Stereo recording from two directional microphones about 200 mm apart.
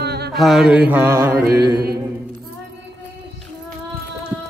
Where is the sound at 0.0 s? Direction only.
55° right (ahead or behind).